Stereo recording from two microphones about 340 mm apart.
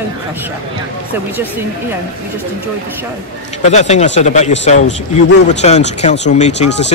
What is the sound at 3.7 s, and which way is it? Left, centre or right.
Speech, centre.